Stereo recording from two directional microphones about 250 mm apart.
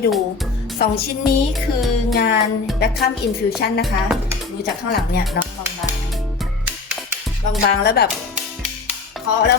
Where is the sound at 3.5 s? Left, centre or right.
Left.